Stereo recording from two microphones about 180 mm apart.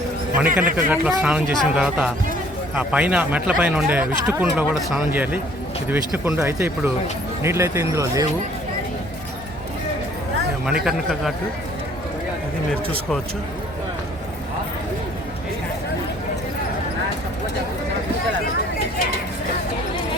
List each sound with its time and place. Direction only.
0.3 s speech: 10° right (ahead or behind)
10.8 s a man's voice: centre (ahead or behind)